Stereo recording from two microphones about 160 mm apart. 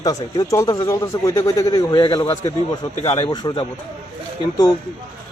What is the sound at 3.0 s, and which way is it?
Speech, 35° left (ahead or behind).